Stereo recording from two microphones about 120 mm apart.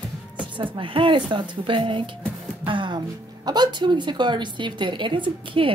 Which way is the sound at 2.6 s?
45° right (ahead or behind).